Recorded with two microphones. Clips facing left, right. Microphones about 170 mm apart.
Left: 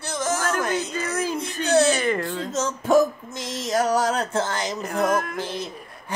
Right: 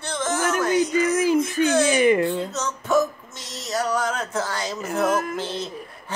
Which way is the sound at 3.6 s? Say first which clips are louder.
Left 3 dB; 45° left (ahead or behind).